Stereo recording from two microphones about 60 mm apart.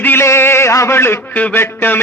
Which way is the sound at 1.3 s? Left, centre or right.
Left.